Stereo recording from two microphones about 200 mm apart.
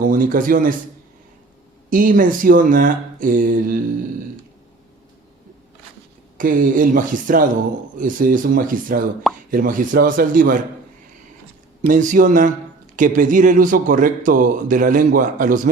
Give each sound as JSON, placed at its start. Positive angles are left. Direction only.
{"t": 0.0, "sound": "speech", "side_deg": -45}
{"t": 1.9, "sound": "speech", "side_deg": -45}
{"t": 6.3, "sound": "speech", "side_deg": -40}
{"t": 11.9, "sound": "a man's voice", "side_deg": -40}